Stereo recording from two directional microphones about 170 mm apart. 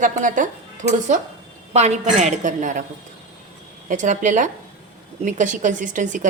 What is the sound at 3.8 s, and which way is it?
A woman's voice, 45° right (ahead or behind).